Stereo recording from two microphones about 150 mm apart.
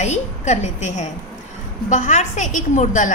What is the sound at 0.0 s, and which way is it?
A woman's voice, 50° left (ahead or behind).